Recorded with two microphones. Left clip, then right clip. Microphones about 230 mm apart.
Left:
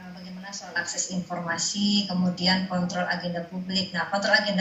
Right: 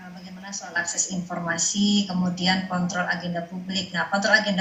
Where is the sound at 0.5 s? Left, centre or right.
Right.